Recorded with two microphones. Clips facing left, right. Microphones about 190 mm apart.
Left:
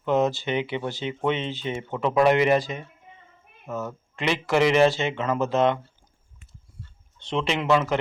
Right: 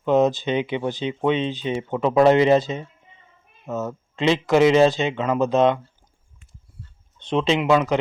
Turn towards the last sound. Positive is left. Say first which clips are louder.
# right 4 dB
turn(degrees=-15)  # may be behind; listen again after turning